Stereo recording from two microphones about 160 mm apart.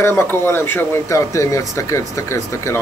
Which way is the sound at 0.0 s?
15° left (ahead or behind).